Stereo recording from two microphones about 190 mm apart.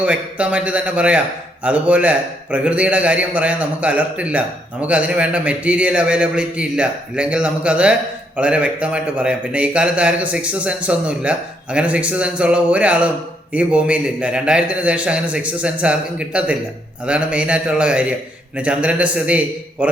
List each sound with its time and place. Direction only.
0.0 s a man's voice: 5° right (ahead or behind)